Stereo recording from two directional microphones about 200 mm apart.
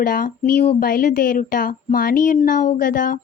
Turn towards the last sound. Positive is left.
turn(degrees=45)  # may be behind; listen again after turning